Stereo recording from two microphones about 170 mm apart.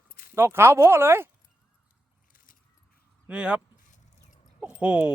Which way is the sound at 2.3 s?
55° left (ahead or behind).